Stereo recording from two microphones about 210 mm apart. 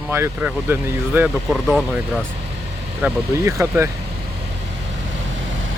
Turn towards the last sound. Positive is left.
turn(degrees=-10)  # may be behind; listen again after turning